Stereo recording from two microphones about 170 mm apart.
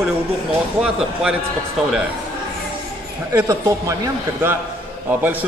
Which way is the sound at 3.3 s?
15° right (ahead or behind).